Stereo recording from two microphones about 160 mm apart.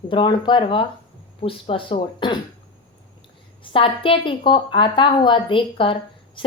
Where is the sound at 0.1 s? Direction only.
30° left (ahead or behind).